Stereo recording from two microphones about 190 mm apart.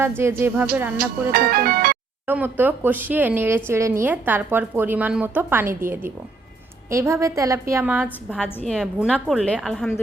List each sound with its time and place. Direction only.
0.2 s a woman's voice: 15° right (ahead or behind)
1.3 s speech: 50° right (ahead or behind)
2.2 s a woman's voice: 10° right (ahead or behind)